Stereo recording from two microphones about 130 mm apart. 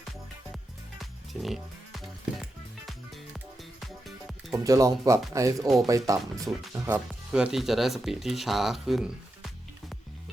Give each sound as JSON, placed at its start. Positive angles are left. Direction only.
{"t": 0.5, "sound": "music", "side_deg": 0}
{"t": 4.5, "sound": "speech", "side_deg": -25}
{"t": 7.3, "sound": "speech", "side_deg": -5}